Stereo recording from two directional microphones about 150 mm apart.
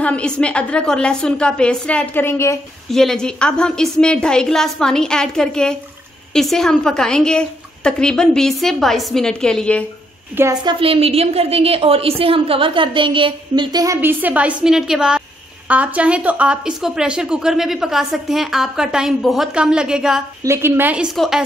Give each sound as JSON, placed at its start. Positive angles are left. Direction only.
{"t": 0.0, "sound": "a woman's voice", "side_deg": 5}
{"t": 2.9, "sound": "a woman's voice", "side_deg": 0}
{"t": 10.3, "sound": "a woman's voice", "side_deg": -20}
{"t": 10.6, "sound": "a woman's voice", "side_deg": -35}
{"t": 14.0, "sound": "a woman's voice", "side_deg": -10}
{"t": 20.4, "sound": "a woman's voice", "side_deg": -15}